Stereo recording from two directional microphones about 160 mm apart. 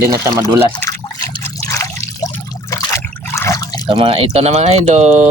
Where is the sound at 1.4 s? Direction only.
20° left (ahead or behind).